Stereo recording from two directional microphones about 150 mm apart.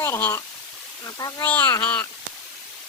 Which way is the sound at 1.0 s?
25° left (ahead or behind).